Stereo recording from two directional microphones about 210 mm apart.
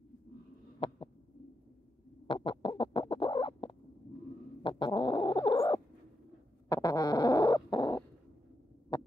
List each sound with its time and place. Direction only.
0.7 s heart sounds: 25° left (ahead or behind)
2.2 s bird: 25° left (ahead or behind)
4.6 s a sound: 25° left (ahead or behind)
6.7 s owl: 15° left (ahead or behind)